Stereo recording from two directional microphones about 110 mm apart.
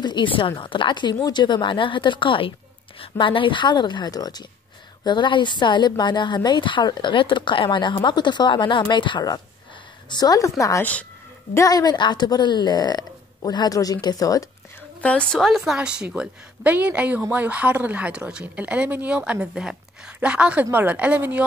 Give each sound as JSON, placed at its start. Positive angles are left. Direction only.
{"t": 0.0, "sound": "a woman's voice", "side_deg": 45}
{"t": 10.8, "sound": "a woman's voice", "side_deg": 15}
{"t": 11.5, "sound": "speech", "side_deg": 30}
{"t": 15.0, "sound": "a woman's voice", "side_deg": 10}